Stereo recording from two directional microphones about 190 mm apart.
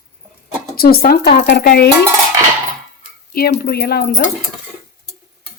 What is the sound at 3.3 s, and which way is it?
Speech, 55° left (ahead or behind).